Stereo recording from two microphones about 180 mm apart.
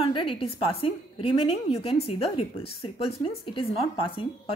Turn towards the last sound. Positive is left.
turn(degrees=30)  # may be behind; listen again after turning